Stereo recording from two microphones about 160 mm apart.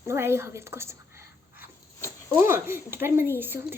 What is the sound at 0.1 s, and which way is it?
Speech, 15° right (ahead or behind).